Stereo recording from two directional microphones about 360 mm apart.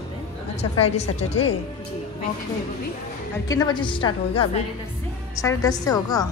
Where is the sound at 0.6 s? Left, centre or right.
Centre.